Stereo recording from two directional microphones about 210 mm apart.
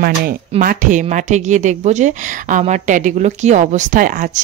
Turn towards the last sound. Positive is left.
turn(degrees=-40)  # may be behind; listen again after turning